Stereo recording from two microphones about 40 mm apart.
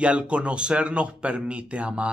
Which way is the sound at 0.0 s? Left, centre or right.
Right.